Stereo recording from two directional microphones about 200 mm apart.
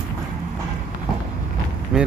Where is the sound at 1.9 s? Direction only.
5° right (ahead or behind).